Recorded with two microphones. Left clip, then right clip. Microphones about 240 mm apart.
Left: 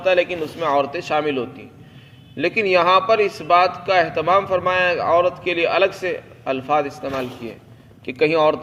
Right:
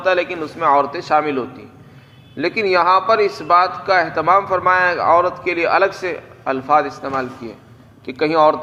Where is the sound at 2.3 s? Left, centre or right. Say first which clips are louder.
Right 1 dB; left.